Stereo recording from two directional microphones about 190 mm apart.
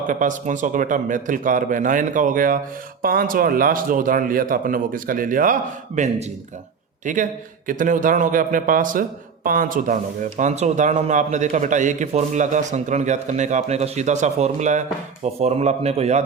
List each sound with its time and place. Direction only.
0.1 s a man's voice: 45° right (ahead or behind)